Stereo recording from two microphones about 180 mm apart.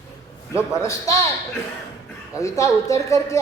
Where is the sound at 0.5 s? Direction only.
15° left (ahead or behind).